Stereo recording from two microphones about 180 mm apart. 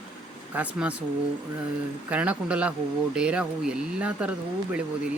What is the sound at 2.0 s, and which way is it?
Speech, 10° right (ahead or behind).